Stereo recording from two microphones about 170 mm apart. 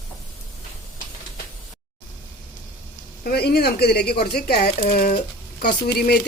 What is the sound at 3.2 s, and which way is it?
Speech, 70° left (ahead or behind).